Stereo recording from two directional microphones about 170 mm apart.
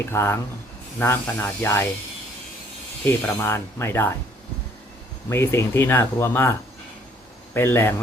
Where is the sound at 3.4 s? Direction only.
15° left (ahead or behind).